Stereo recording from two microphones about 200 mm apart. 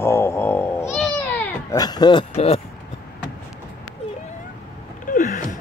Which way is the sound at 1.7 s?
20° left (ahead or behind).